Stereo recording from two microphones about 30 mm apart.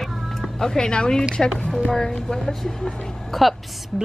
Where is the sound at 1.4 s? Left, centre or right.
Centre.